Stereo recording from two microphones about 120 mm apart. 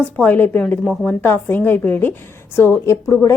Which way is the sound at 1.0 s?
15° left (ahead or behind).